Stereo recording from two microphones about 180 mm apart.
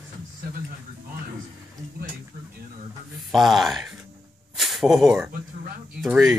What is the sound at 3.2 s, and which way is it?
Speech, centre (ahead or behind).